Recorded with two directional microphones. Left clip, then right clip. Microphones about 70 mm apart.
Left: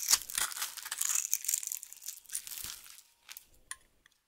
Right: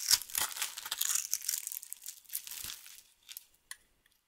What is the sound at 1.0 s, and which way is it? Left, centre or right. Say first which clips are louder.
Crushing: left 2 dB; centre.